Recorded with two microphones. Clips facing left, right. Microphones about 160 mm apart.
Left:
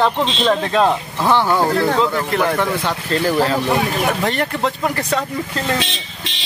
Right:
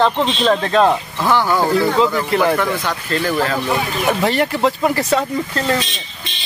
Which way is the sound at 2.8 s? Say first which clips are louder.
Left 1 dB; 30° left (ahead or behind).